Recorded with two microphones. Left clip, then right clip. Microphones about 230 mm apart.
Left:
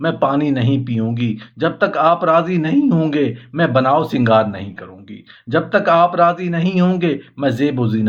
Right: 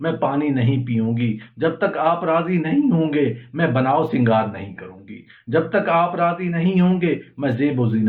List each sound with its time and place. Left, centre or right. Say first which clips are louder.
0.0 s speech: left 4 dB; left